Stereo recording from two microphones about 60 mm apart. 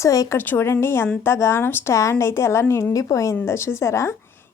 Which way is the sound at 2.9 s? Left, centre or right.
Left.